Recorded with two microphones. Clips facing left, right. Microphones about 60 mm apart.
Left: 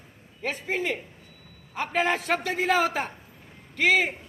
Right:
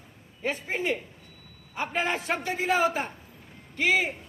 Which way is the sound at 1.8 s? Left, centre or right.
Left.